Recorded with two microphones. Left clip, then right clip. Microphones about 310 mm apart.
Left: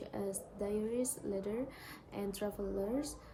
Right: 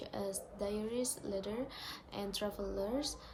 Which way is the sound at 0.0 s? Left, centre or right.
Centre.